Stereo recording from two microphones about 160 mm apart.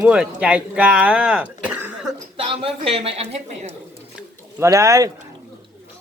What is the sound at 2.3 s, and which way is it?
Speech, 35° right (ahead or behind).